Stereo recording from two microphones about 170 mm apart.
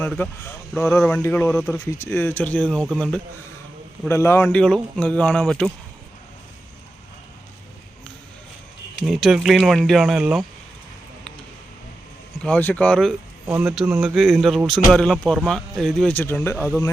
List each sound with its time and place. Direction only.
0.0 s speech: 10° left (ahead or behind)
1.5 s speech: centre (ahead or behind)
1.7 s speech: 15° left (ahead or behind)
4.1 s speech: 15° left (ahead or behind)
4.4 s speech: 5° left (ahead or behind)
9.0 s speech: centre (ahead or behind)
12.4 s speech: 10° left (ahead or behind)
13.5 s speech: 5° right (ahead or behind); by 16.9 s 15° left (ahead or behind)